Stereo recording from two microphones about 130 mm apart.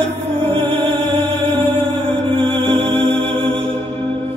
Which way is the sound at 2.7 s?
40° right (ahead or behind).